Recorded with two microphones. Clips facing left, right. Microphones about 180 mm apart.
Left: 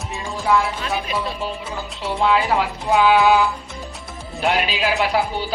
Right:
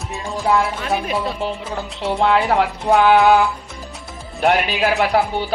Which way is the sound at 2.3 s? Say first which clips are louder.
Right 3 dB; 55° right (ahead or behind).